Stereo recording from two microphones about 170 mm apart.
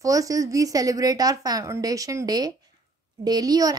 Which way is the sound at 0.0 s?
20° right (ahead or behind).